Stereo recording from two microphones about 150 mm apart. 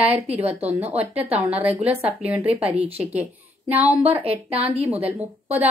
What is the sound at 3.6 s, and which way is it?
Speech, 10° right (ahead or behind).